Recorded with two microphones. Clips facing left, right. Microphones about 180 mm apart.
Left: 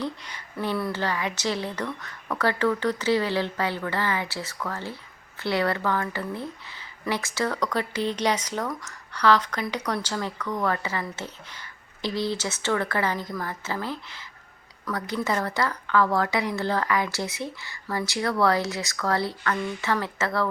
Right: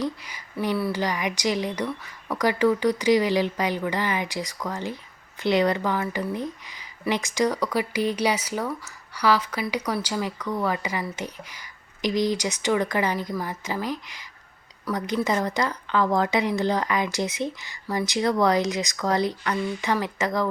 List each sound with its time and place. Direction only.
0.0 s speech: 10° right (ahead or behind)